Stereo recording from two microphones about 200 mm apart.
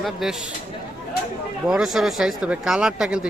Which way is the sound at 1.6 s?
5° right (ahead or behind).